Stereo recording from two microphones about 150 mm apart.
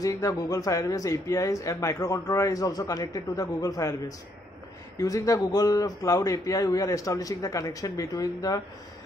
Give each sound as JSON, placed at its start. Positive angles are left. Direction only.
{"t": 0.0, "sound": "speech", "side_deg": 20}
{"t": 4.9, "sound": "speech", "side_deg": 20}